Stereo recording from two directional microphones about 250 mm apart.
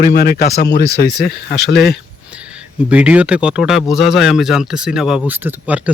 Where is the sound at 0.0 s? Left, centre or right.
Left.